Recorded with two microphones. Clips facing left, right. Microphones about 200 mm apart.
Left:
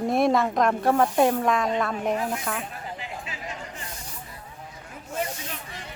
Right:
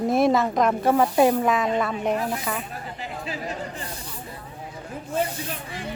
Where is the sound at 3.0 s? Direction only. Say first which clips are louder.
Right 5 dB; 35° right (ahead or behind).